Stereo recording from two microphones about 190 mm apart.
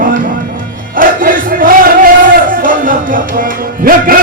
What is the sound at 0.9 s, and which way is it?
Crowd, 45° right (ahead or behind).